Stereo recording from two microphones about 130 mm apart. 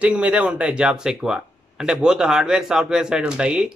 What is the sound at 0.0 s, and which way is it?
Speech, 10° right (ahead or behind).